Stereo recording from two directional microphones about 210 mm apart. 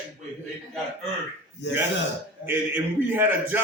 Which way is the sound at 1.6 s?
55° left (ahead or behind).